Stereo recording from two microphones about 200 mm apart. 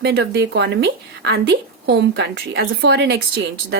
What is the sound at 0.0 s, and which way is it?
A woman's voice, 55° right (ahead or behind).